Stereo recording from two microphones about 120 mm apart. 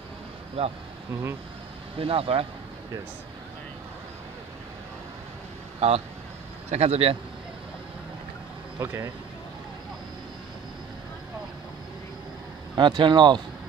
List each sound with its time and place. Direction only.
0.6 s speech: 55° right (ahead or behind)
2.0 s speech: 50° right (ahead or behind)
5.8 s speech: 60° right (ahead or behind)
8.8 s speech: 20° right (ahead or behind)
12.7 s speech: 40° right (ahead or behind)